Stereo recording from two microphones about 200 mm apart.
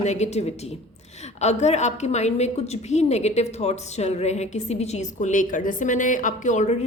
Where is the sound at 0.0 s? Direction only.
35° left (ahead or behind).